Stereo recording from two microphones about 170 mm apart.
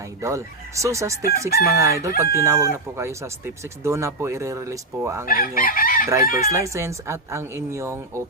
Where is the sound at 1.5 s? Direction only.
65° left (ahead or behind).